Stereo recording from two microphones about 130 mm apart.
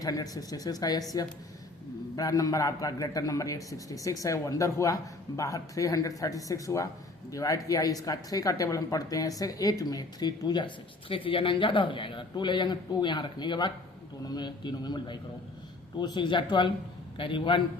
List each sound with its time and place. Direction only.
0.0 s speech: 30° left (ahead or behind)
2.1 s a man's voice: 25° left (ahead or behind)